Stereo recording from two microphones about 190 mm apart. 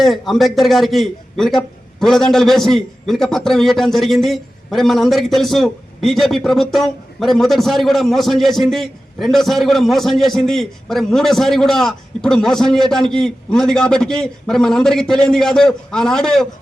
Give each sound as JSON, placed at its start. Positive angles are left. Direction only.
{"t": 0.0, "sound": "a man's voice", "side_deg": 0}